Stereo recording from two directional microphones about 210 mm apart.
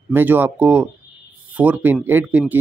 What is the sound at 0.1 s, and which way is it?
Speech, 10° right (ahead or behind).